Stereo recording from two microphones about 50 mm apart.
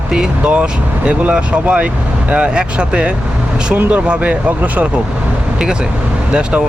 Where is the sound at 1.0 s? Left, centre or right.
Right.